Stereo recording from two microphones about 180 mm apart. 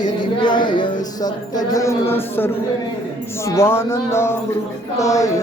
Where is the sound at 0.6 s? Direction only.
25° left (ahead or behind).